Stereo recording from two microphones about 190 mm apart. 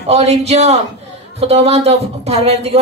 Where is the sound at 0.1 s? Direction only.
35° right (ahead or behind).